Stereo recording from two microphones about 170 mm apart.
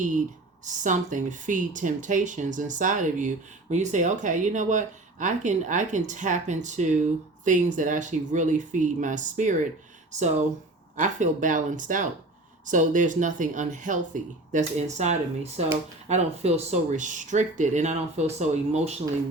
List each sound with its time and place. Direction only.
0.6 s speech: 45° right (ahead or behind)